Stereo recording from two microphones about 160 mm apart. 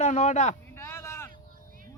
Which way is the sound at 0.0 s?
50° left (ahead or behind).